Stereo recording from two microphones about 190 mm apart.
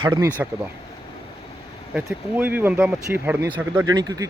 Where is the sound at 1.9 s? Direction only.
10° right (ahead or behind).